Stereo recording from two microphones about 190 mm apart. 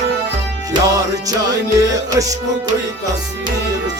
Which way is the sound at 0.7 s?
20° right (ahead or behind).